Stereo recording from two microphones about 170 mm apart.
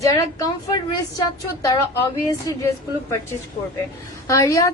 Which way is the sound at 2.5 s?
20° left (ahead or behind).